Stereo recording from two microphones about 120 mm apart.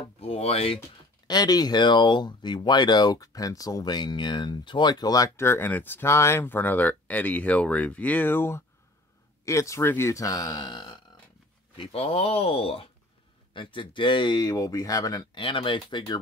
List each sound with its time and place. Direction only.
0.2 s music: 55° left (ahead or behind)
1.2 s speech: 35° left (ahead or behind)
11.7 s speech: 50° left (ahead or behind); by 15.4 s 30° left (ahead or behind)
15.4 s speech: 45° left (ahead or behind)